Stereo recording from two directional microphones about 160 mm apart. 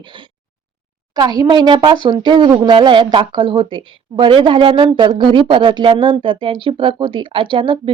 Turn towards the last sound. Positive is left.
turn(degrees=-30)  # may be behind; listen again after turning